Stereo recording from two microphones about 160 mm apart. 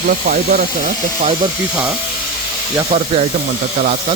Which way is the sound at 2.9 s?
55° right (ahead or behind).